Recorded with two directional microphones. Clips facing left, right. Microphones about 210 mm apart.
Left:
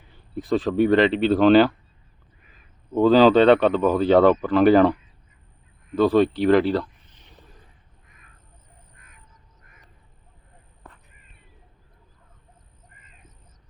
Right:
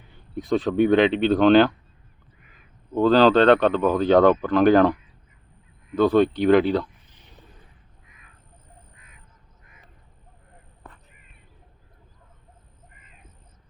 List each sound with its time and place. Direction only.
0.1 s speech: centre (ahead or behind)
2.9 s speech: 10° left (ahead or behind)
6.0 s speech: centre (ahead or behind)
9.0 s duck: 50° left (ahead or behind)